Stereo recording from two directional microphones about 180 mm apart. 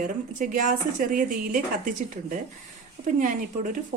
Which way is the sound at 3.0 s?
45° right (ahead or behind).